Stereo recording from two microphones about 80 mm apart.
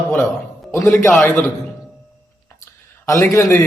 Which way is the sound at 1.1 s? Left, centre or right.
Centre.